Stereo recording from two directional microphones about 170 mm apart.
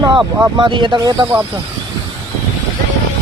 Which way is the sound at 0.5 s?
30° right (ahead or behind).